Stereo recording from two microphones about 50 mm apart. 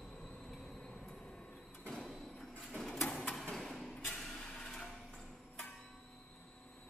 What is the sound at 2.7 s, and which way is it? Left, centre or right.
Printer, centre.